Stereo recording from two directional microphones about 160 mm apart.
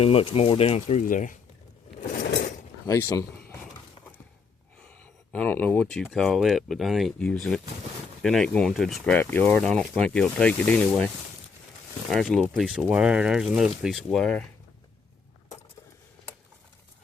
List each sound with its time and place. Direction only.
0.0 s speech: 35° left (ahead or behind)
1.0 s speech: 55° left (ahead or behind)
2.0 s a sound: 50° left (ahead or behind)
2.8 s speech: 20° left (ahead or behind)
5.3 s speech: 10° left (ahead or behind)